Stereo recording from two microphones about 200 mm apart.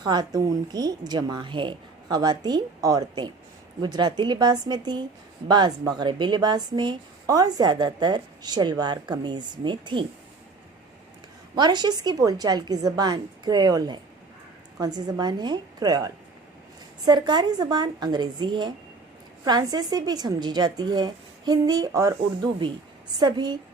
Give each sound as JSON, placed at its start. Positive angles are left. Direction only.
{"t": 0.0, "sound": "a woman's voice", "side_deg": -20}
{"t": 11.5, "sound": "a woman's voice", "side_deg": -20}
{"t": 23.2, "sound": "a woman's voice", "side_deg": -20}